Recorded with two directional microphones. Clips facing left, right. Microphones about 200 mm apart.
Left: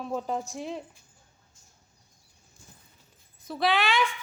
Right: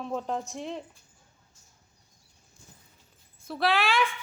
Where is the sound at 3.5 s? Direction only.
Centre (ahead or behind).